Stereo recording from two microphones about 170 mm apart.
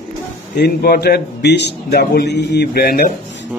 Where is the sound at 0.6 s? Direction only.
65° left (ahead or behind).